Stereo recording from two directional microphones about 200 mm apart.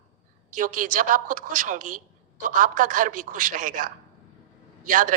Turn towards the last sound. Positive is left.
turn(degrees=-40)  # may be behind; listen again after turning